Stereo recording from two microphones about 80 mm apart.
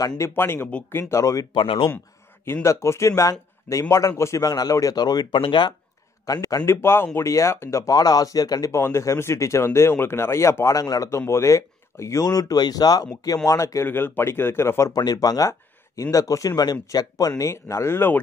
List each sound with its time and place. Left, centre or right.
0.0 s speech: left
0.4 s speech: left
1.5 s speech: left
2.4 s speech: left
6.2 s a man's voice: left
6.7 s speech: left
13.5 s speech: left
13.8 s speech: left
14.9 s speech: left
17.4 s speech: left